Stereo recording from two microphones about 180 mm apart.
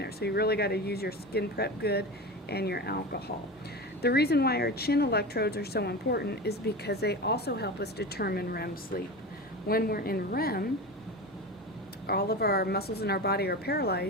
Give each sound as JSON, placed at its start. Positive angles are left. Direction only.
{"t": 0.0, "sound": "speech", "side_deg": 65}
{"t": 12.0, "sound": "speech", "side_deg": 60}